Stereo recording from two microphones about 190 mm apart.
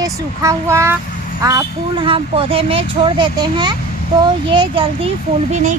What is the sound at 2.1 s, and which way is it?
Speech, 30° right (ahead or behind).